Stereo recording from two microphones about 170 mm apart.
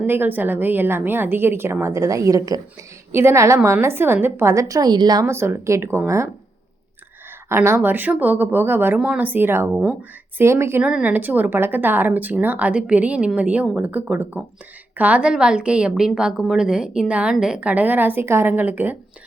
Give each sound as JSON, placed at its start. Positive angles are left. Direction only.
{"t": 0.0, "sound": "a woman's voice", "side_deg": -10}
{"t": 7.5, "sound": "a woman's voice", "side_deg": -15}